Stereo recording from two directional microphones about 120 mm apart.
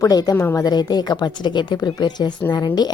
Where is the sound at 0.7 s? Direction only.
35° left (ahead or behind).